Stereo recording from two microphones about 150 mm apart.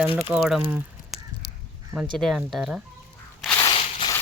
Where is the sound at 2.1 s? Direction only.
Centre (ahead or behind).